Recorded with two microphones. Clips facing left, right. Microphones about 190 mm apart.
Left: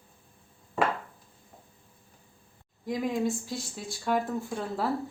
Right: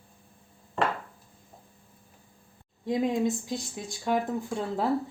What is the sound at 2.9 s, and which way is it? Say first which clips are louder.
Speech: right 3 dB; 20° right (ahead or behind).